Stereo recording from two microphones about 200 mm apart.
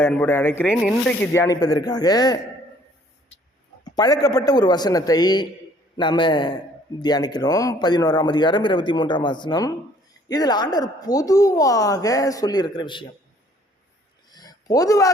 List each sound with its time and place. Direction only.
0.0 s speech: 10° left (ahead or behind)
3.9 s speech: 20° left (ahead or behind)
14.3 s a sound: 20° left (ahead or behind)